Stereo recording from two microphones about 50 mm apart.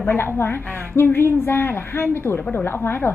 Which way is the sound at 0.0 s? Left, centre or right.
Left.